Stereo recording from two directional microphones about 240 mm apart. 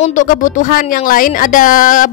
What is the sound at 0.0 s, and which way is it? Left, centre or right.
Speech, left.